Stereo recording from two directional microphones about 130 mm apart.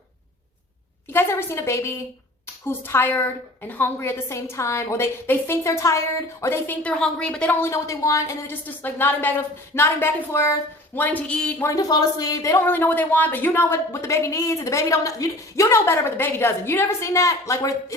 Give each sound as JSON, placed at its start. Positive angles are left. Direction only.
{"t": 1.1, "sound": "a woman's voice", "side_deg": 20}
{"t": 11.7, "sound": "speech", "side_deg": 25}